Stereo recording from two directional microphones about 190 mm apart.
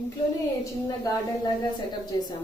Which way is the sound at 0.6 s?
20° left (ahead or behind).